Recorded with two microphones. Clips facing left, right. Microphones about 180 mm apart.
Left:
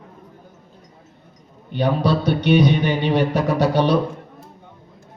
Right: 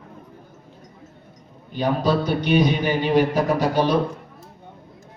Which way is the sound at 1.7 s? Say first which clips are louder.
Left 1 dB; 70° left (ahead or behind).